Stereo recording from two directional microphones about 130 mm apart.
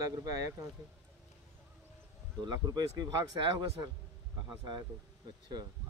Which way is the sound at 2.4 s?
30° right (ahead or behind).